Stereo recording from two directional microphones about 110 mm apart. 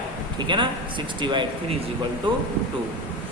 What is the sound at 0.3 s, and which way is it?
A man's voice, 45° right (ahead or behind).